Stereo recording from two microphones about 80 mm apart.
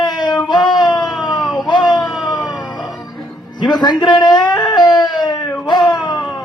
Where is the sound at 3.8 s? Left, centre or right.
Left.